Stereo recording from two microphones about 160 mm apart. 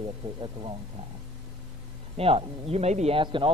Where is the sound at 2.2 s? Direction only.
40° right (ahead or behind).